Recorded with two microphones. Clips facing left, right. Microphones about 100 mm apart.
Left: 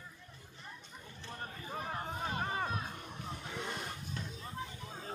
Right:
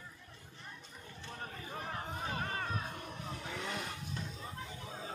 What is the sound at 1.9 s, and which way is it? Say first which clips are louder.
Crowd: left 1 dB; 10° left (ahead or behind).